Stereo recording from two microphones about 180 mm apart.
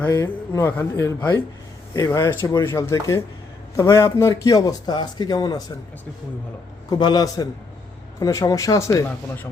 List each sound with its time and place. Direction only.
0.0 s a man's voice: 15° left (ahead or behind)
6.9 s a man's voice: 20° left (ahead or behind)